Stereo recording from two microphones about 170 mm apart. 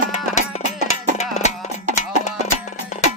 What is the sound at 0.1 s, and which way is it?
Music, 45° left (ahead or behind).